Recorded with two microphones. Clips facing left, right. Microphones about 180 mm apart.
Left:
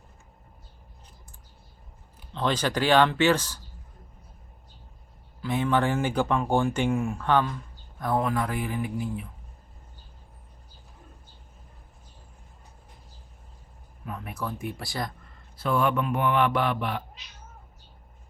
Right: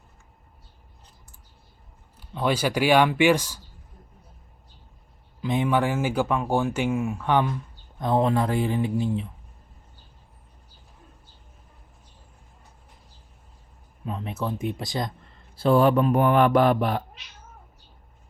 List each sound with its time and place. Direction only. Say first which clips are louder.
2.3 s speech: right 2 dB; 10° right (ahead or behind)
5.4 s speech: right 2 dB; 15° right (ahead or behind)
14.0 s speech: right 4 dB; 25° right (ahead or behind)
15.5 s speech: right 6 dB; 30° right (ahead or behind)